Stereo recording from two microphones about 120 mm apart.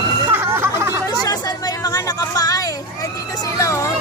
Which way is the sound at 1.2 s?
35° left (ahead or behind).